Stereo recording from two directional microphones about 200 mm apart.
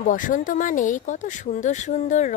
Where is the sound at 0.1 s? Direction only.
40° left (ahead or behind).